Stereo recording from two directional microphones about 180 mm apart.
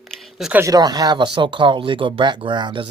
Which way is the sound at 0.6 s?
20° right (ahead or behind).